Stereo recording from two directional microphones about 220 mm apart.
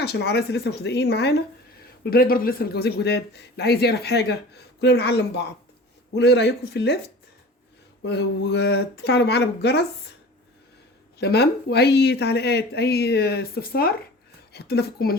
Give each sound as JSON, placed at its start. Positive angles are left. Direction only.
{"t": 0.0, "sound": "speech", "side_deg": 50}
{"t": 8.0, "sound": "speech", "side_deg": 50}
{"t": 11.2, "sound": "speech", "side_deg": 50}